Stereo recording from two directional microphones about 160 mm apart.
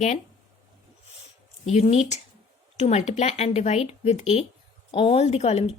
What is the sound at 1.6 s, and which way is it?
A woman's voice, 45° left (ahead or behind).